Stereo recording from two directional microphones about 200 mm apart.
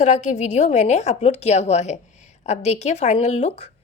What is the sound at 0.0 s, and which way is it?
A woman's voice, 35° left (ahead or behind).